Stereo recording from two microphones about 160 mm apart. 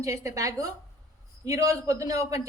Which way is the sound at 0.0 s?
20° right (ahead or behind).